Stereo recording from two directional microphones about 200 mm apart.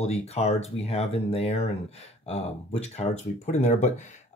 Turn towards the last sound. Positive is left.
turn(degrees=35)  # may be behind; listen again after turning